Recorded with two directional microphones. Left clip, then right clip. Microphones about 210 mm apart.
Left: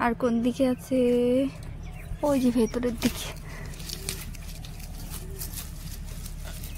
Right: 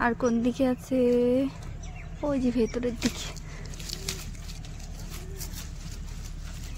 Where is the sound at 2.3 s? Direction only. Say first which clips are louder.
Left 3 dB; 15° left (ahead or behind).